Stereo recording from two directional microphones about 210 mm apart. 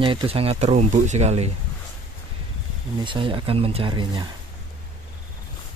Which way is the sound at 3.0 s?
25° right (ahead or behind).